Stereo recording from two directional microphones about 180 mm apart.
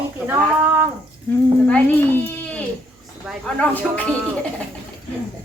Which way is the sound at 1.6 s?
10° left (ahead or behind).